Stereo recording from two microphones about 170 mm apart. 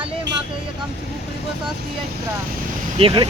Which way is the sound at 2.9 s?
30° right (ahead or behind).